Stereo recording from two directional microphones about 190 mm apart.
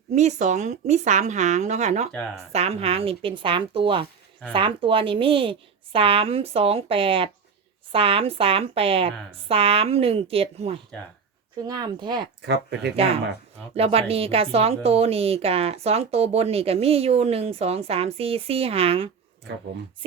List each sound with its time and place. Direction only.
0.1 s speech: 35° right (ahead or behind)
2.1 s speech: 5° left (ahead or behind)
2.5 s a woman's voice: 30° right (ahead or behind)
11.6 s a woman's voice: 20° right (ahead or behind)
12.4 s speech: 60° right (ahead or behind)
13.0 s speech: 30° right (ahead or behind)